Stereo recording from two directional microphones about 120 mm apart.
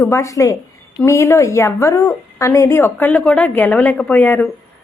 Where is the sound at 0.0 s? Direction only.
25° left (ahead or behind).